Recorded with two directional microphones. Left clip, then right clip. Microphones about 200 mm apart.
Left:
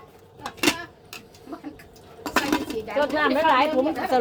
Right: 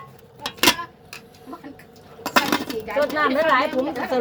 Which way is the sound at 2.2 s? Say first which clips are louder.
Right 4 dB; 35° right (ahead or behind).